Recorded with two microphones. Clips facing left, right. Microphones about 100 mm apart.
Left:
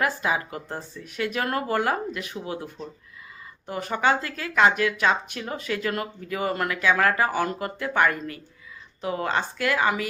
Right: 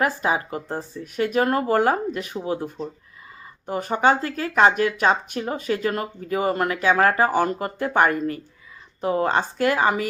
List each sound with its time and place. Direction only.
0.0 s speech: 30° right (ahead or behind)
1.0 s speech: 40° right (ahead or behind)